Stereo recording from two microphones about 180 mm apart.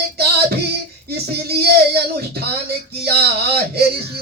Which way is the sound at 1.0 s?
65° right (ahead or behind).